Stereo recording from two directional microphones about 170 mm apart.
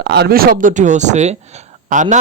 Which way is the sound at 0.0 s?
65° right (ahead or behind).